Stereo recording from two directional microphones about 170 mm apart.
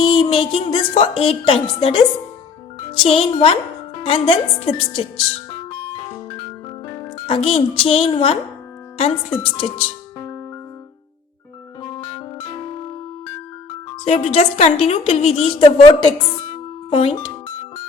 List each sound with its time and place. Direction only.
0.0 s a woman's voice: 30° left (ahead or behind)
6.9 s a woman's voice: 35° left (ahead or behind)
10.2 s music: 15° left (ahead or behind)
11.8 s music: 25° left (ahead or behind)
14.0 s a woman's voice: 40° left (ahead or behind)
16.9 s a woman's voice: 35° left (ahead or behind)